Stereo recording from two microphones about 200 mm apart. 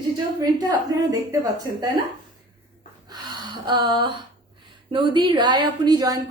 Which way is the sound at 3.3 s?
20° right (ahead or behind).